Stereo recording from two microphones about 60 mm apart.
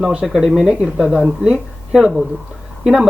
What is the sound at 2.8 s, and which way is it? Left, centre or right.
Speech, centre.